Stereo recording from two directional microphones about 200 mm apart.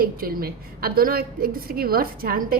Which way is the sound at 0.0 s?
45° right (ahead or behind).